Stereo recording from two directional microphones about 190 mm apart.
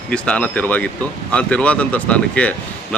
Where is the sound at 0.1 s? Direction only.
5° left (ahead or behind).